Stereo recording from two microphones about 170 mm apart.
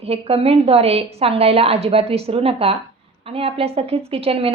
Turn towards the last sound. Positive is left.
turn(degrees=-35)  # may be behind; listen again after turning